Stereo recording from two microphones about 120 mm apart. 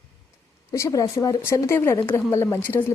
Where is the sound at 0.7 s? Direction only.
30° left (ahead or behind).